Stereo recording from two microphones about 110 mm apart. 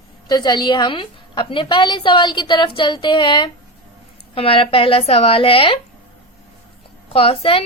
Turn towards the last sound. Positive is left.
turn(degrees=60)  # may be behind; listen again after turning